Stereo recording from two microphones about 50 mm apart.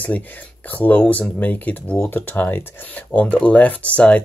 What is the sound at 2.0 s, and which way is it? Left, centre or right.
Speech, left.